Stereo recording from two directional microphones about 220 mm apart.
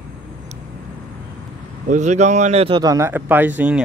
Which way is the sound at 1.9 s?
30° right (ahead or behind).